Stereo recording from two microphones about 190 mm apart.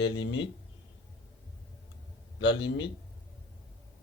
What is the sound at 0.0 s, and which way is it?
Speech, 75° left (ahead or behind).